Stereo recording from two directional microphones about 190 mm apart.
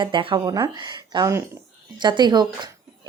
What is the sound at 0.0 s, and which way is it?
A woman's voice, 25° right (ahead or behind).